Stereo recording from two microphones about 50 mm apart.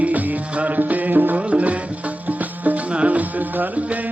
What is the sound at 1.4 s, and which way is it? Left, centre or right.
Music, right.